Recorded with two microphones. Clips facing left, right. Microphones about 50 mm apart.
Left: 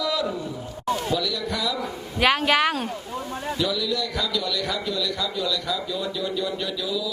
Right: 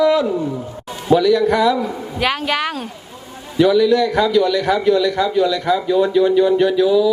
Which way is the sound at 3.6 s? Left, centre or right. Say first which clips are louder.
Right 15 dB; right.